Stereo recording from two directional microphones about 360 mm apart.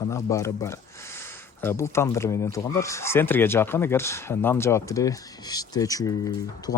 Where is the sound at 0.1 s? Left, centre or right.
Centre.